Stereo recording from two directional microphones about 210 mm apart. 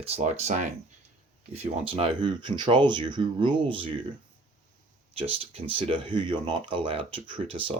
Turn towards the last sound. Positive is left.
turn(degrees=-25)  # may be behind; listen again after turning